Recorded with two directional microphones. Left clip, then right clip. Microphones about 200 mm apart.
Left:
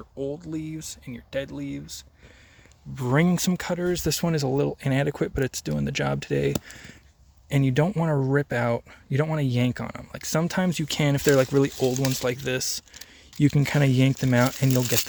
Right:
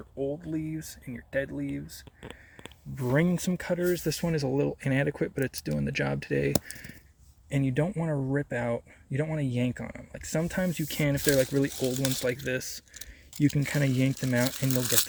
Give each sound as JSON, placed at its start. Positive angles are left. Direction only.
{"t": 0.2, "sound": "speech", "side_deg": 20}
{"t": 2.9, "sound": "speech", "side_deg": 30}
{"t": 3.7, "sound": "speech", "side_deg": 30}
{"t": 4.2, "sound": "speech", "side_deg": 45}
{"t": 7.5, "sound": "speech", "side_deg": 40}